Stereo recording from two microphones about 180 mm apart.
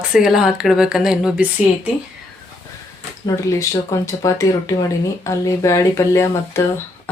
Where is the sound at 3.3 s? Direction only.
20° left (ahead or behind).